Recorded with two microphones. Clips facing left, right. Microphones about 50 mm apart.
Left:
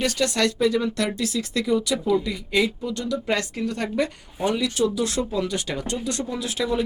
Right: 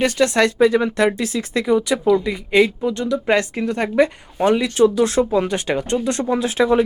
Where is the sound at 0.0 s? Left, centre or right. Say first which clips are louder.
Right 6 dB; right.